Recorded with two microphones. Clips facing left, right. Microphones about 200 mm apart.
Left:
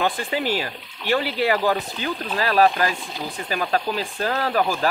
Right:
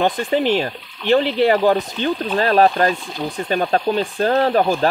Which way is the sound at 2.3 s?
35° right (ahead or behind).